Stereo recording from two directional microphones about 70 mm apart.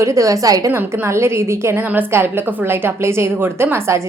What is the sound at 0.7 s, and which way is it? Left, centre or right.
A woman's voice, right.